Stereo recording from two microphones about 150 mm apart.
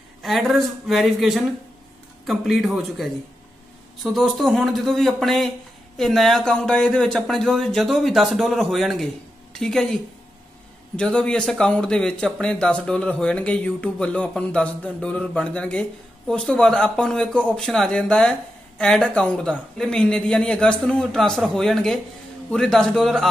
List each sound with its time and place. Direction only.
0.2 s a man's voice: centre (ahead or behind)
11.0 s speech: 5° left (ahead or behind)